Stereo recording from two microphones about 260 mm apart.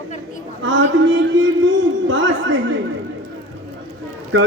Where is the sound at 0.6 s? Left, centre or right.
Right.